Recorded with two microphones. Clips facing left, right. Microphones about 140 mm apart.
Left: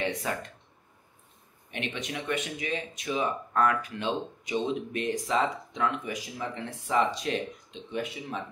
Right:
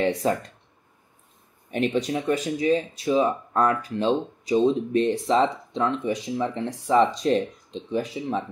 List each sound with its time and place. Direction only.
0.0 s speech: 35° right (ahead or behind)
1.7 s speech: 40° right (ahead or behind)